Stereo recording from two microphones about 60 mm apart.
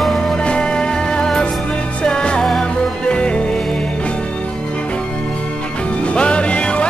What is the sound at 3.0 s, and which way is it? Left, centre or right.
Music, centre.